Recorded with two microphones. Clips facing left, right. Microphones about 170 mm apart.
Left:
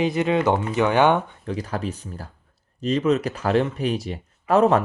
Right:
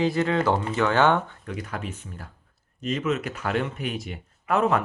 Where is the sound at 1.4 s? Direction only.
30° left (ahead or behind).